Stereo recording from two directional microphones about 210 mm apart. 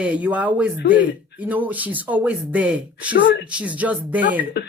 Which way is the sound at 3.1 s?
50° left (ahead or behind).